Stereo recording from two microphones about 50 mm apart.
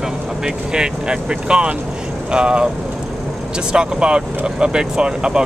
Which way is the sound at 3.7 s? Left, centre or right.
Right.